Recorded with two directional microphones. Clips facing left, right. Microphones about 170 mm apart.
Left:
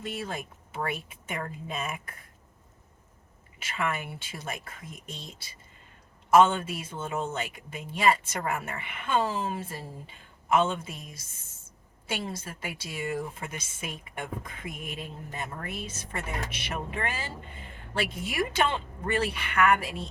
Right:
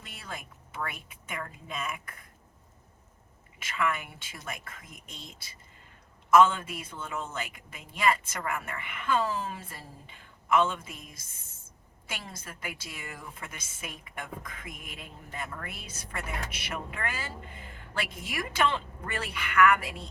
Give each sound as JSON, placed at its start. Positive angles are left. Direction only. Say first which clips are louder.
{"t": 0.3, "sound": "a woman's voice", "louder": "left 5 dB", "side_deg": 25}
{"t": 3.8, "sound": "a woman's voice", "louder": "even", "side_deg": 30}
{"t": 6.3, "sound": "a woman's voice", "louder": "left 1 dB", "side_deg": 30}
{"t": 12.0, "sound": "a woman's voice", "louder": "left 8 dB", "side_deg": 25}